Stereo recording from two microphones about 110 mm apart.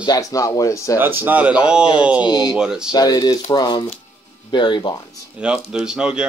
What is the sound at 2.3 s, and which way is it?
Speech, 40° left (ahead or behind).